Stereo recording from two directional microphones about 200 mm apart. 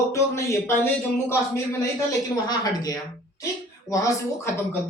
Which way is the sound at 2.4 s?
20° left (ahead or behind).